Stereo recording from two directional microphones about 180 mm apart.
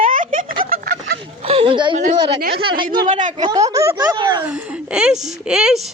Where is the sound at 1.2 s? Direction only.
30° right (ahead or behind).